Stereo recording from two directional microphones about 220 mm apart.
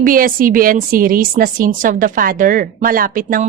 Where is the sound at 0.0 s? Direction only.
40° right (ahead or behind).